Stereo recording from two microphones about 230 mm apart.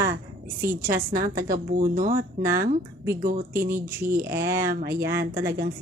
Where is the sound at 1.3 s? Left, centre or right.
Right.